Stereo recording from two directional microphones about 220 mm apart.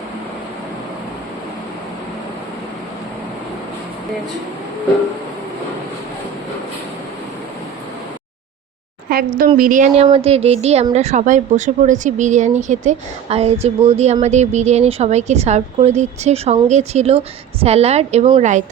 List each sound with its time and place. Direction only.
9.0 s a woman's voice: 40° right (ahead or behind)